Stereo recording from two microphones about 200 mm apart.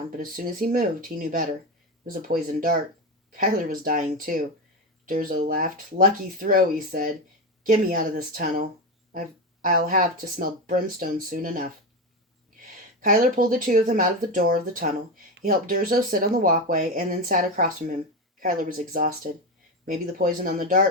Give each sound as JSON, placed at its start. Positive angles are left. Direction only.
{"t": 0.2, "sound": "speech", "side_deg": -45}
{"t": 13.0, "sound": "speech", "side_deg": -45}